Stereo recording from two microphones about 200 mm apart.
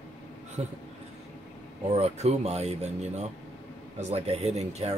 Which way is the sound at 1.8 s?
30° right (ahead or behind).